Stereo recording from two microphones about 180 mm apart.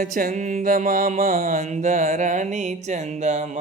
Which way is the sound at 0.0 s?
50° right (ahead or behind).